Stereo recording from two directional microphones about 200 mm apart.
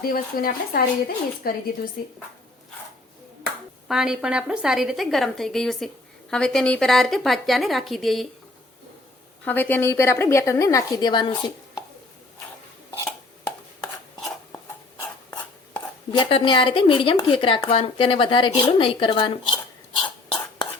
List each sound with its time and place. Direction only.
0.0 s speech: 45° left (ahead or behind)
3.8 s a woman's voice: 5° right (ahead or behind)
9.4 s a woman's voice: 10° left (ahead or behind)
14.2 s a sound: 5° left (ahead or behind)
15.0 s chopping: 10° left (ahead or behind)
16.1 s speech: 25° left (ahead or behind)
20.0 s cough: 20° left (ahead or behind)